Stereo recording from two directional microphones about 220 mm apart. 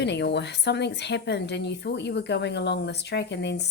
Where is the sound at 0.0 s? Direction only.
50° left (ahead or behind).